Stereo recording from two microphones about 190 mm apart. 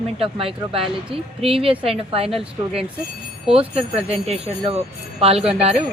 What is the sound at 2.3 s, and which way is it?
Speech, 5° right (ahead or behind).